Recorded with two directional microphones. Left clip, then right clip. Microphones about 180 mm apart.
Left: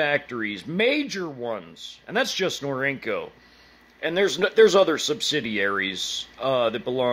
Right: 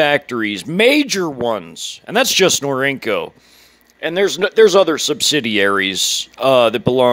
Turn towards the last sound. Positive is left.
turn(degrees=-45)  # may be behind; listen again after turning